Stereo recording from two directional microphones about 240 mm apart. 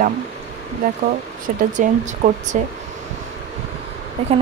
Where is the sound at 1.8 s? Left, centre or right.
Right.